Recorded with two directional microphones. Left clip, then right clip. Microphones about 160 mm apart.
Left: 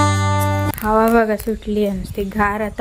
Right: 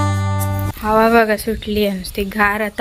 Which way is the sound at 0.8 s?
5° left (ahead or behind).